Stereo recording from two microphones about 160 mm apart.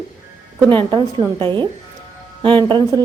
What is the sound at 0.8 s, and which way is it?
A woman's voice, 30° right (ahead or behind).